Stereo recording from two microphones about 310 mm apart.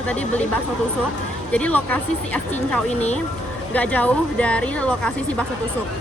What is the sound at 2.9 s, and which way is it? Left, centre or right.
Speech, left.